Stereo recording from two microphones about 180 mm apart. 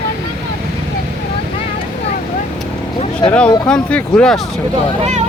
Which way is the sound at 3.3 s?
5° left (ahead or behind).